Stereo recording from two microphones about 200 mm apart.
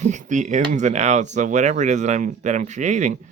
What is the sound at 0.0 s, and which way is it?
Speech, 35° right (ahead or behind).